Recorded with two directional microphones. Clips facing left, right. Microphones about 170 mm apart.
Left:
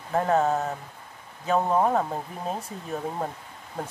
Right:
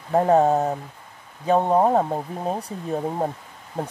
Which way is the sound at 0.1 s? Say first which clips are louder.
Right 6 dB; 30° right (ahead or behind).